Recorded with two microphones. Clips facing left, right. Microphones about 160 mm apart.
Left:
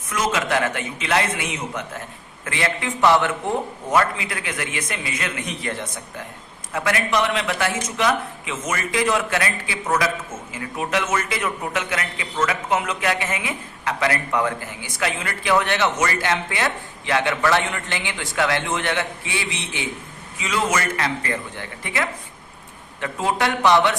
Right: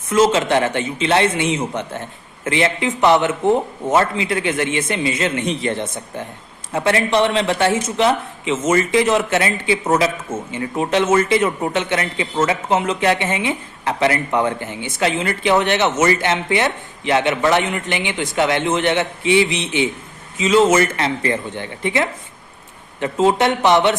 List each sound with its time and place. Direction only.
0.1 s a man's voice: 25° right (ahead or behind)